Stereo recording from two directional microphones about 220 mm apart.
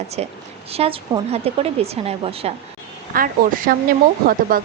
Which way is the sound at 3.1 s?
40° right (ahead or behind).